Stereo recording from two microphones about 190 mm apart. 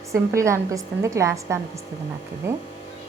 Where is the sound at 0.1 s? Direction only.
15° right (ahead or behind).